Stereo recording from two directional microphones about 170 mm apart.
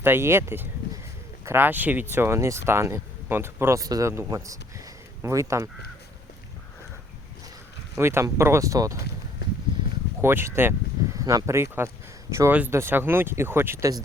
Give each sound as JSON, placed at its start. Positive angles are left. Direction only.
{"t": 0.0, "sound": "a man's voice", "side_deg": -15}
{"t": 7.9, "sound": "speech", "side_deg": -15}
{"t": 10.2, "sound": "speech", "side_deg": -15}